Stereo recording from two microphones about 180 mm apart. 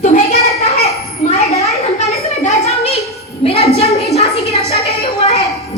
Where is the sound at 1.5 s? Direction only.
35° left (ahead or behind).